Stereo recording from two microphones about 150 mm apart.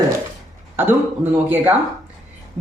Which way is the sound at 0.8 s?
15° right (ahead or behind).